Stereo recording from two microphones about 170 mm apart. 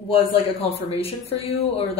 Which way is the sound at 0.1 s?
35° left (ahead or behind).